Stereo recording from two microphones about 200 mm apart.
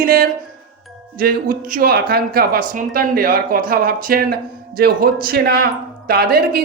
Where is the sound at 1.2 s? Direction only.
45° right (ahead or behind).